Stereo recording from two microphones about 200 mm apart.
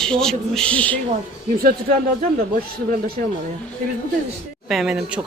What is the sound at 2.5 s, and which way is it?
Speech, 50° right (ahead or behind).